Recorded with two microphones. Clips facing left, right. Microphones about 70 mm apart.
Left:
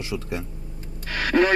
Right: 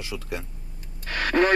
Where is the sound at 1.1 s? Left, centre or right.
Right.